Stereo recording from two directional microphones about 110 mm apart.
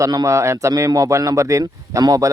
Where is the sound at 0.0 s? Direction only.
30° right (ahead or behind).